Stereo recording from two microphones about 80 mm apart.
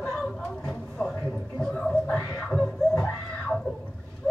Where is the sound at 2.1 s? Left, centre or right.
Left.